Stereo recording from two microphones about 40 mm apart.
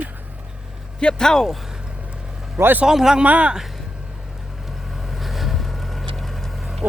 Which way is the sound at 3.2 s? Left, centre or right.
Right.